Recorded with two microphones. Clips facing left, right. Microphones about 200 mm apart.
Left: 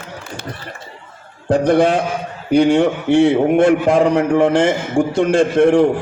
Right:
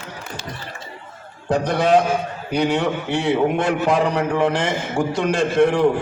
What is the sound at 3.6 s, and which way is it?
A man's voice, 55° left (ahead or behind).